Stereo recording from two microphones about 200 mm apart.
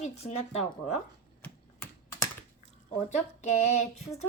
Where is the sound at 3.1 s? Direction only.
35° left (ahead or behind).